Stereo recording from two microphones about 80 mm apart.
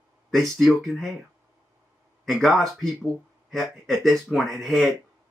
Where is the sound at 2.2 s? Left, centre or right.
Centre.